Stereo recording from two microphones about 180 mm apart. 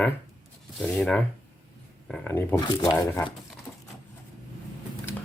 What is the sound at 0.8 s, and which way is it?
Speech, 5° left (ahead or behind).